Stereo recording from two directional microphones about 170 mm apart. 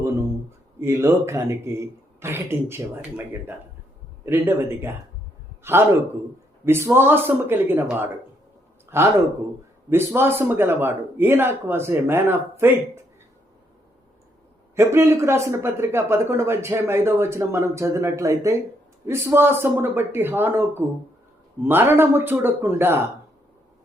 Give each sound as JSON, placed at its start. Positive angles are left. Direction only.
{"t": 0.8, "sound": "a man's voice", "side_deg": -15}
{"t": 4.3, "sound": "a man's voice", "side_deg": -15}
{"t": 14.8, "sound": "a man's voice", "side_deg": -15}